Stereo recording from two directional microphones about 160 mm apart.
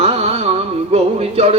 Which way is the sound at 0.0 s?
40° right (ahead or behind).